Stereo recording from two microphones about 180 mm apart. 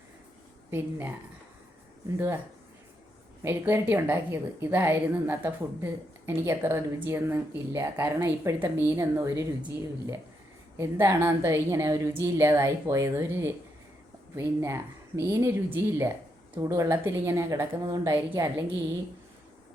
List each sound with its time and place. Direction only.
0.7 s a woman's voice: 10° right (ahead or behind)
3.4 s a woman's voice: 15° right (ahead or behind)